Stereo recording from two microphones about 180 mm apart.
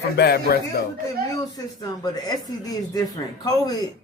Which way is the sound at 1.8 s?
20° left (ahead or behind).